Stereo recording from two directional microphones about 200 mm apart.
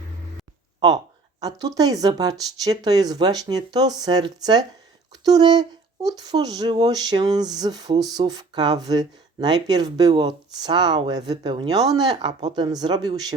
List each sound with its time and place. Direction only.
1.4 s speech: 20° right (ahead or behind)